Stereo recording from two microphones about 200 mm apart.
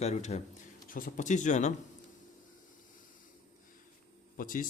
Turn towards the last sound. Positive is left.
turn(degrees=45)  # may be behind; listen again after turning